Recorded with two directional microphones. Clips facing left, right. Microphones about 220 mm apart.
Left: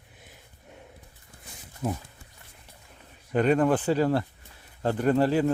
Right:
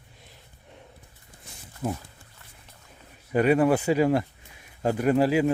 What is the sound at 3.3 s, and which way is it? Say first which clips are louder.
Speech: right 2 dB; 10° right (ahead or behind).